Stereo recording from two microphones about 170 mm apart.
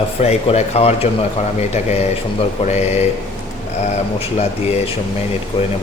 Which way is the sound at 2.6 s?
40° left (ahead or behind).